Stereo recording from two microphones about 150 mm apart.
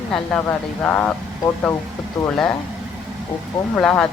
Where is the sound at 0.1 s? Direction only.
5° left (ahead or behind).